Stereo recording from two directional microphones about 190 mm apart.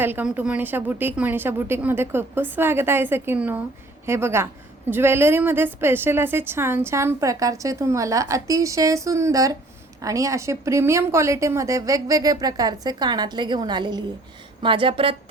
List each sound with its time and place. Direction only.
0.0 s a woman's voice: 10° right (ahead or behind); by 15.1 s 30° right (ahead or behind)